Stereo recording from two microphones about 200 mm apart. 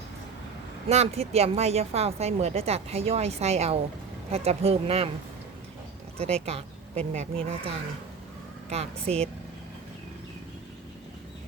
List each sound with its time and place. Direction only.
0.9 s a woman's voice: 30° right (ahead or behind)
6.1 s a woman's voice: 30° right (ahead or behind)
8.7 s a woman's voice: 30° right (ahead or behind)